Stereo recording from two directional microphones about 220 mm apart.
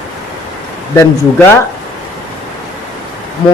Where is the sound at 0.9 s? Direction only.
10° left (ahead or behind).